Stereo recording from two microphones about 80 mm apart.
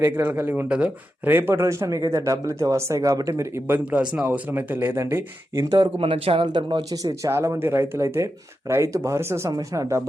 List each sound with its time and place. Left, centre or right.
0.0 s speech: right
3.7 s speech: right
5.8 s speech: right
6.9 s speech: right
7.3 s speech: right